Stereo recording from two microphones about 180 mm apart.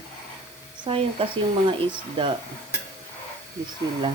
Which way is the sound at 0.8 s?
30° right (ahead or behind).